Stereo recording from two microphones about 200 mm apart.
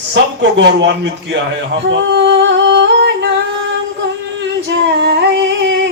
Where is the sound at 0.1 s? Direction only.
60° right (ahead or behind).